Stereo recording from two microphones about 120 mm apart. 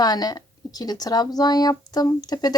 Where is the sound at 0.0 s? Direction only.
35° left (ahead or behind).